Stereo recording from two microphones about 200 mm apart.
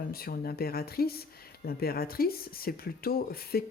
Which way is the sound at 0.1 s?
50° left (ahead or behind).